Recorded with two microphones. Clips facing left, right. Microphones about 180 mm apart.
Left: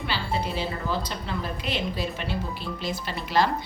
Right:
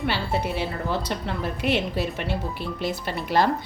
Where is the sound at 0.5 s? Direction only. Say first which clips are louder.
Right 2 dB; 60° right (ahead or behind).